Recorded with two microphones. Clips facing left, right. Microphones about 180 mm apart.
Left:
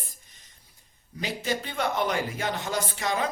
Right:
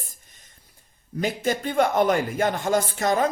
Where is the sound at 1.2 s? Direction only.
50° right (ahead or behind).